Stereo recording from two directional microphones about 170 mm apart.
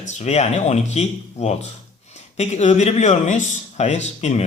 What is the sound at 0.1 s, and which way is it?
Speech, 40° left (ahead or behind).